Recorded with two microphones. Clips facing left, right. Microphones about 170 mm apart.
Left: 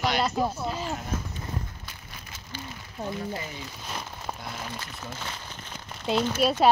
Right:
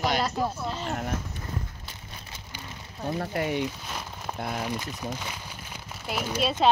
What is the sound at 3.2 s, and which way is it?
Speech, 65° right (ahead or behind).